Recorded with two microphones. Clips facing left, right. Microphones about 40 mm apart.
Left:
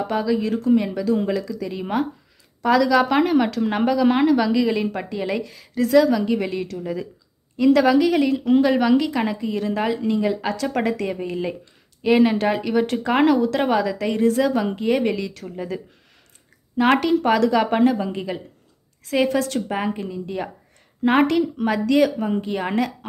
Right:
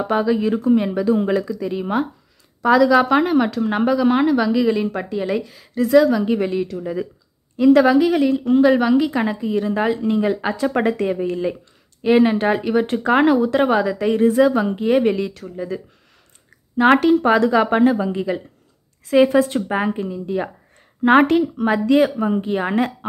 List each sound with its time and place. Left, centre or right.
0.1 s speech: right
10.0 s speech: right
11.1 s speech: centre
12.3 s speech: centre
15.4 s speech: centre
16.7 s speech: centre
17.9 s speech: centre
19.1 s speech: right
19.9 s speech: centre
21.0 s speech: right